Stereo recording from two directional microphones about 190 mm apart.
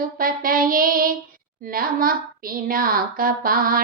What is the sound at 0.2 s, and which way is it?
Child singing, 50° right (ahead or behind).